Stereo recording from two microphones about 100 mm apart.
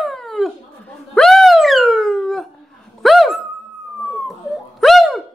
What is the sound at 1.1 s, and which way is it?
Wail, centre (ahead or behind).